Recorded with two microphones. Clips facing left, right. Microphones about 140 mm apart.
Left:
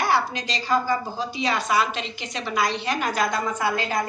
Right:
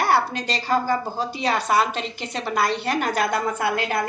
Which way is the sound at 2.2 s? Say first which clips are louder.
Right 2 dB; 55° right (ahead or behind).